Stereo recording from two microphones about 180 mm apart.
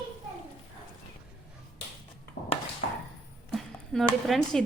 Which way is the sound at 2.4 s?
80° left.